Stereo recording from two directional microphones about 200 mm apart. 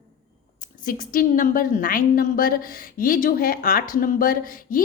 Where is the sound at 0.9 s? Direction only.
40° left (ahead or behind).